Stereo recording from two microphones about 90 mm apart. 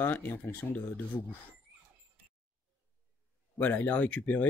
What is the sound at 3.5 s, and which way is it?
Speech, 20° left (ahead or behind).